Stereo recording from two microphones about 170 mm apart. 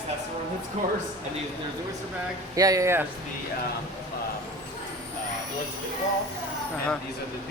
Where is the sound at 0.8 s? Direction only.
40° right (ahead or behind).